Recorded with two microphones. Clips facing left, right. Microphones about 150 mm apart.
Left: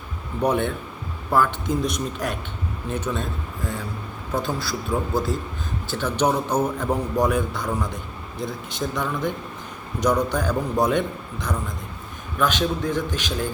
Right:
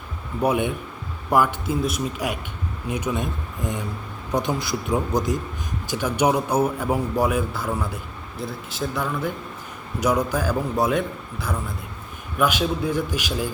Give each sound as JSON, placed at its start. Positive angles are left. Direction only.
{"t": 0.4, "sound": "a man's voice", "side_deg": -10}